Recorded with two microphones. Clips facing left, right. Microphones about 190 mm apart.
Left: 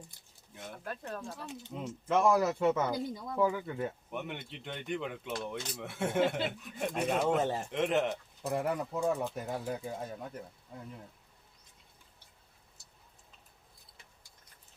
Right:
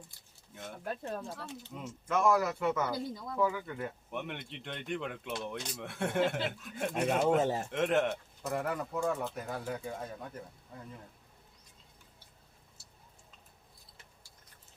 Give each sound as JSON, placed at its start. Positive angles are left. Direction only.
{"t": 0.9, "sound": "speech", "side_deg": -15}
{"t": 1.7, "sound": "speech", "side_deg": 25}
{"t": 4.1, "sound": "speech", "side_deg": 0}
{"t": 8.9, "sound": "speech", "side_deg": 20}